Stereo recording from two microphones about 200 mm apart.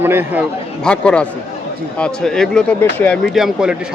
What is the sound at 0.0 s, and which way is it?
Speech, 10° right (ahead or behind).